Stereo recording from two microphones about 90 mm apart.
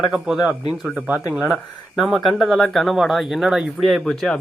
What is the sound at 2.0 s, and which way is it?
Speech, 5° left (ahead or behind).